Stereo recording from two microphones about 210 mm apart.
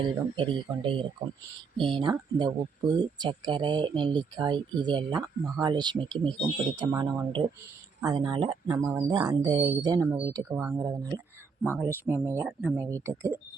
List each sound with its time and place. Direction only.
0.0 s speech: 25° right (ahead or behind)